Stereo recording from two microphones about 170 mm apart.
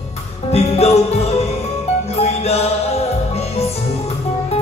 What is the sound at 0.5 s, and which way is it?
Music, 40° left (ahead or behind).